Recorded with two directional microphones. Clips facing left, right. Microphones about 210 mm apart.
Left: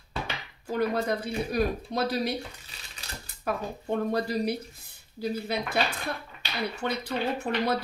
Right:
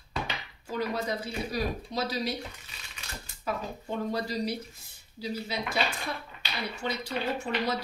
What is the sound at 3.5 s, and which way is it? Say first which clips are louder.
Speech: left 4 dB; 55° left (ahead or behind).